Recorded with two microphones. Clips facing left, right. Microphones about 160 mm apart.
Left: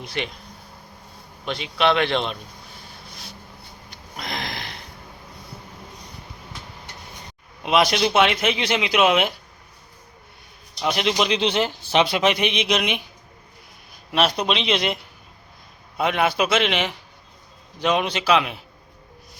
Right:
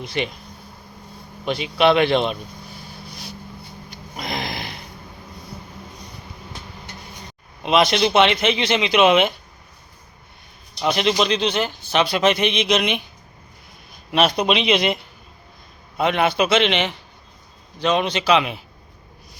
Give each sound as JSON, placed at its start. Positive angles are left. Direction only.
{"t": 0.0, "sound": "speech", "side_deg": 0}
{"t": 1.5, "sound": "a sound", "side_deg": -5}
{"t": 7.6, "sound": "speech", "side_deg": 5}
{"t": 10.8, "sound": "speech", "side_deg": 5}
{"t": 11.3, "sound": "a man's voice", "side_deg": 20}
{"t": 14.1, "sound": "speech", "side_deg": 0}
{"t": 16.0, "sound": "speech", "side_deg": 5}